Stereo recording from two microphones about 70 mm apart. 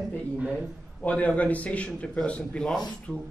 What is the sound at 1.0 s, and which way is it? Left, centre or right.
Speech, centre.